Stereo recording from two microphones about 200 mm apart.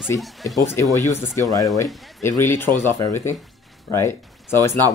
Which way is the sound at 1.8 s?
Centre (ahead or behind).